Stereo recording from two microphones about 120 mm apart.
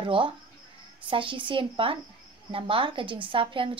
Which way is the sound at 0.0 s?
45° right (ahead or behind).